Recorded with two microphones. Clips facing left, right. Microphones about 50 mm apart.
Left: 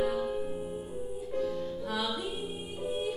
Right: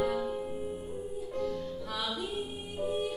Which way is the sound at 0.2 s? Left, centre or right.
Centre.